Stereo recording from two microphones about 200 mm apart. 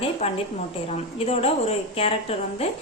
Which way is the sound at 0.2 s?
30° left (ahead or behind).